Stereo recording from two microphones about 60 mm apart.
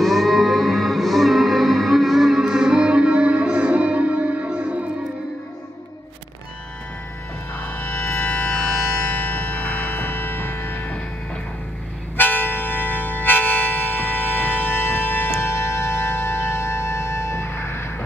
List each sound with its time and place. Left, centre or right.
0.0 s music: centre
7.6 s music: left
12.2 s music: left